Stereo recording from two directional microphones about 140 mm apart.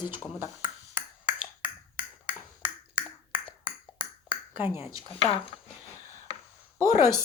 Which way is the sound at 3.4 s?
30° left (ahead or behind).